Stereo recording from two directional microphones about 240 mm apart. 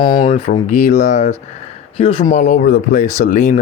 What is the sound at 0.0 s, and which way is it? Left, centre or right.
Speech, centre.